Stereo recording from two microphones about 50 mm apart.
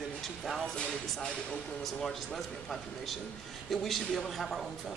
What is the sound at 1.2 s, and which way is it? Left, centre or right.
Speech, centre.